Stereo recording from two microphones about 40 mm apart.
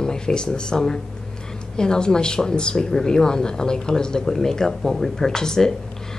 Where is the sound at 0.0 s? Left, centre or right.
Centre.